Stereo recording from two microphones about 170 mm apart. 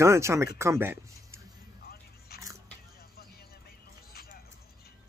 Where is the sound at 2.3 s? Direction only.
65° left (ahead or behind).